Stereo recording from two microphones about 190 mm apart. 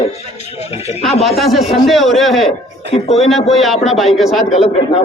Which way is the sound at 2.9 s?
30° left (ahead or behind).